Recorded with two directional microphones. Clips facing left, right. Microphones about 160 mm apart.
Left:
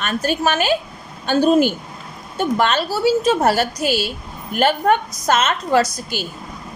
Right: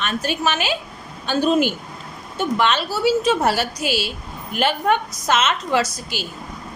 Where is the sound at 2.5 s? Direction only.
45° left (ahead or behind).